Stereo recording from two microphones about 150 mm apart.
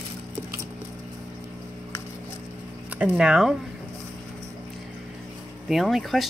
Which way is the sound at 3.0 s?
5° right (ahead or behind).